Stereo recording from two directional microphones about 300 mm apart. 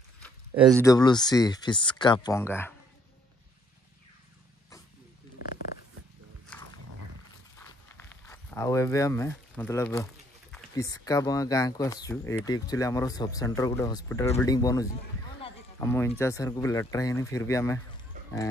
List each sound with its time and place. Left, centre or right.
0.2 s a sound: centre
0.8 s speech: centre
5.4 s zipper: left
7.5 s walk: centre
10.5 s speech: centre
15.4 s run: centre
16.2 s speech: centre